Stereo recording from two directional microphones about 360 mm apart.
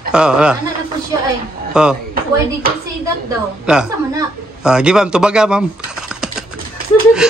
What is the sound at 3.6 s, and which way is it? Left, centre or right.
A man's voice, centre.